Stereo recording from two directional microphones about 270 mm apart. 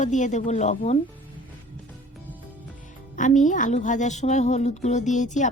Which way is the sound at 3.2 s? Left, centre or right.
Left.